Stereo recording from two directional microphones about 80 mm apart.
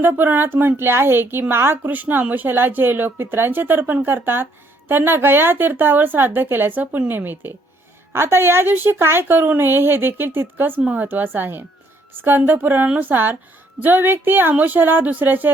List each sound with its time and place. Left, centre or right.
0.0 s a woman's voice: right
10.8 s a woman's voice: centre